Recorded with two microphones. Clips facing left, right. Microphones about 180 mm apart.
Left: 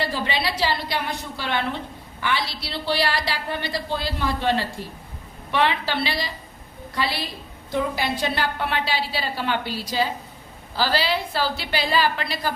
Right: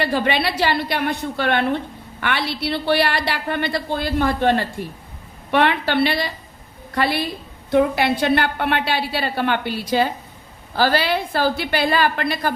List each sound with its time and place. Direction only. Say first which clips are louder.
0.0 s a woman's voice: right 5 dB; 60° right (ahead or behind)